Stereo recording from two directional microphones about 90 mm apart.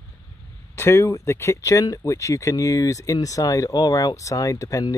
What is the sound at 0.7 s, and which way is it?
Speech, 30° left (ahead or behind).